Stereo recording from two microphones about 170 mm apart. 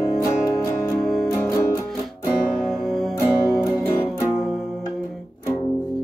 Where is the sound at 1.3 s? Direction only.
15° left (ahead or behind).